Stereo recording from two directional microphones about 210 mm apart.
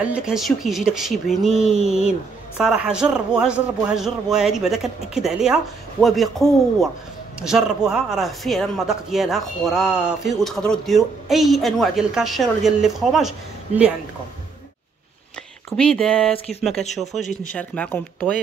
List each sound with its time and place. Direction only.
0.0 s speech: 5° right (ahead or behind)
7.3 s speech: 5° right (ahead or behind)
15.7 s speech: 5° left (ahead or behind)
16.8 s speech: 35° left (ahead or behind)
17.6 s speech: 5° left (ahead or behind)